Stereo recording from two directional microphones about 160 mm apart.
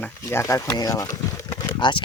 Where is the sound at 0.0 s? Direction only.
15° left (ahead or behind).